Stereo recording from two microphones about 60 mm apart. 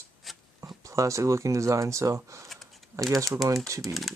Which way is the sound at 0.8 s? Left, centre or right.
Right.